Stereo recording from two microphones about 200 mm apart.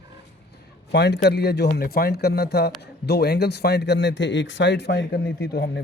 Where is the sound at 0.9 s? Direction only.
60° left (ahead or behind).